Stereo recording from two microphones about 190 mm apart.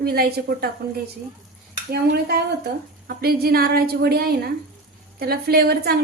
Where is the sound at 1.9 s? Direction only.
55° right (ahead or behind).